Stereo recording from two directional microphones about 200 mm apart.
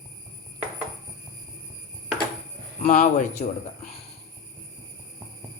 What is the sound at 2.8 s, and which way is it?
Speech, 30° left (ahead or behind).